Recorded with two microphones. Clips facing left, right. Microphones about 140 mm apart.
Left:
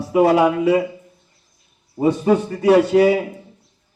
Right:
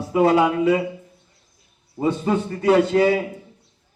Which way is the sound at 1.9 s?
15° left (ahead or behind).